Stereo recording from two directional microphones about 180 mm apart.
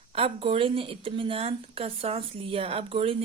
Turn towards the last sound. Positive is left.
turn(degrees=-30)  # may be behind; listen again after turning